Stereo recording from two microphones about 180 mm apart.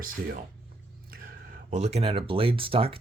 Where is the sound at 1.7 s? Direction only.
35° right (ahead or behind).